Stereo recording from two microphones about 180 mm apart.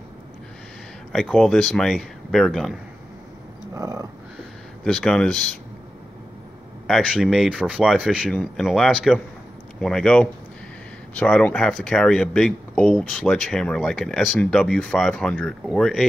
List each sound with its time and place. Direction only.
1.1 s speech: 5° left (ahead or behind)
3.7 s a sound: 20° right (ahead or behind)
4.8 s speech: 5° left (ahead or behind)
6.9 s speech: centre (ahead or behind)